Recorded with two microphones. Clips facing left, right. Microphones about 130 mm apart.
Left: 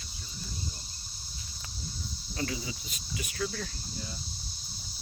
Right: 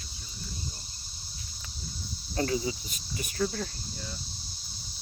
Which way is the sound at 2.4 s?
40° right (ahead or behind).